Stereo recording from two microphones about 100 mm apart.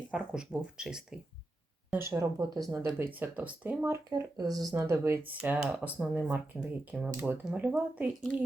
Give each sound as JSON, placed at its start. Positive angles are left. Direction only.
{"t": 0.1, "sound": "speech", "side_deg": -10}
{"t": 2.0, "sound": "speech", "side_deg": -30}
{"t": 3.0, "sound": "speech", "side_deg": -20}
{"t": 4.1, "sound": "speech", "side_deg": -40}
{"t": 4.7, "sound": "speech", "side_deg": -25}
{"t": 5.4, "sound": "speech", "side_deg": -15}